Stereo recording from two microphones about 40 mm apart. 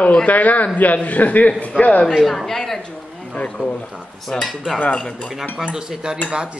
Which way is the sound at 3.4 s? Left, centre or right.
Left.